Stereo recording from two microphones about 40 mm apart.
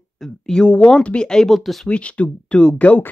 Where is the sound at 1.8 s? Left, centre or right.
Left.